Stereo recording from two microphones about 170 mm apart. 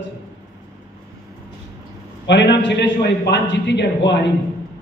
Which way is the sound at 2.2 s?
90° left.